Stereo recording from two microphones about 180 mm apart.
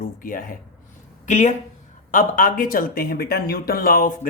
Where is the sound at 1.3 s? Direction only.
40° left (ahead or behind).